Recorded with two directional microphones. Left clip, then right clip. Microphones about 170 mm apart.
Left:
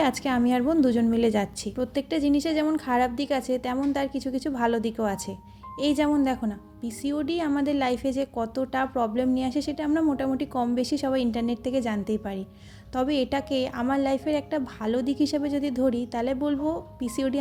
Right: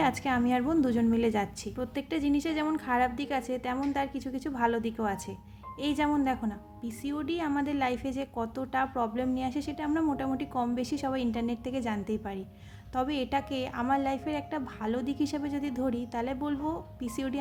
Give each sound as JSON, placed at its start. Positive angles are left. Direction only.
{"t": 0.0, "sound": "a woman's voice", "side_deg": 35}